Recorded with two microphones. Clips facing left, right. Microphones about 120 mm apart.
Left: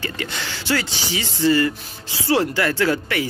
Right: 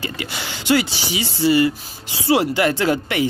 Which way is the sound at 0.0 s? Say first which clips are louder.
Even; 10° right (ahead or behind).